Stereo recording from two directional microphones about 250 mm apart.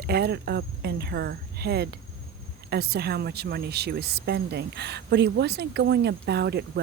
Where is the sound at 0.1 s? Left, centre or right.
Right.